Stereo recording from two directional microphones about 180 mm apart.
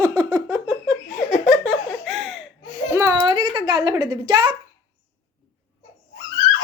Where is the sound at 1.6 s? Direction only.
5° right (ahead or behind).